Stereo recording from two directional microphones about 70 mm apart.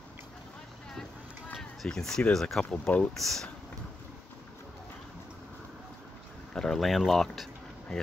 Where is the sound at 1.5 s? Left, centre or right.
Centre.